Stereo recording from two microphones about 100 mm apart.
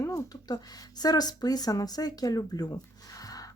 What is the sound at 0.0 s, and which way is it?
Speech, 40° left (ahead or behind).